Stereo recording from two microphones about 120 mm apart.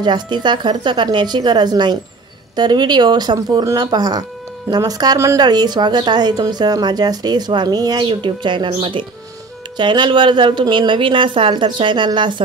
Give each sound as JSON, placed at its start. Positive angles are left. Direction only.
{"t": 0.0, "sound": "a woman's voice", "side_deg": -40}